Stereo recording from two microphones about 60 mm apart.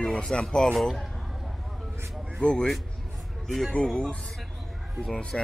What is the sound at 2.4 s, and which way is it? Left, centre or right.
Speech, centre.